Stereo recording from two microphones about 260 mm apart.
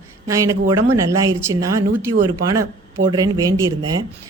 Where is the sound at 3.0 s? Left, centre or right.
Centre.